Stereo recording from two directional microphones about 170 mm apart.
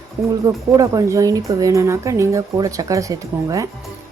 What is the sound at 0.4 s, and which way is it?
A woman's voice, 20° right (ahead or behind).